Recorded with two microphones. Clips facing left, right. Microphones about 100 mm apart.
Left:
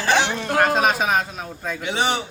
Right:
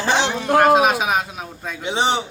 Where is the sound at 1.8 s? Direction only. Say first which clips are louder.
Right 3 dB; 25° right (ahead or behind).